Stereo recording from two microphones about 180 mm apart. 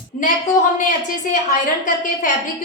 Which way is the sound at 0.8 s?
45° left (ahead or behind).